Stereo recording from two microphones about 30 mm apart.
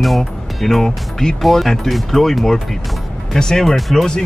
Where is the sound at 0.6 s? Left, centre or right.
Centre.